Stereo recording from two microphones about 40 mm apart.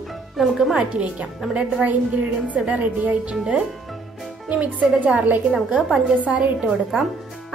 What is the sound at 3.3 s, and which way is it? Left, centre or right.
A woman's voice, centre.